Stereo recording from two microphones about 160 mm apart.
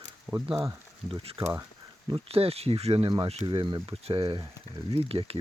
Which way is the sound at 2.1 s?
40° right (ahead or behind).